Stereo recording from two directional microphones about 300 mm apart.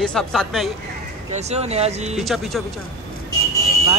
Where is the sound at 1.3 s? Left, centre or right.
Right.